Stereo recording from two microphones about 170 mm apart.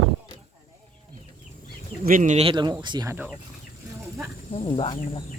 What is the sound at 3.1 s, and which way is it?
Speech, 10° right (ahead or behind).